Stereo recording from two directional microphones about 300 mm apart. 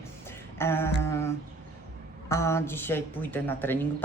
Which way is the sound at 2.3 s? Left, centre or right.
Centre.